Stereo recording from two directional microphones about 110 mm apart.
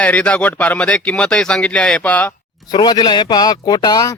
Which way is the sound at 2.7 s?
40° left (ahead or behind).